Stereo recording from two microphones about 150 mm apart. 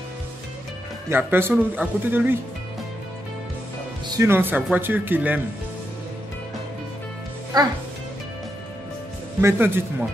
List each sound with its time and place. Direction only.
1.0 s speech: 15° right (ahead or behind)
4.2 s speech: 15° right (ahead or behind)
7.5 s speech: 25° right (ahead or behind)
9.4 s speech: 15° right (ahead or behind)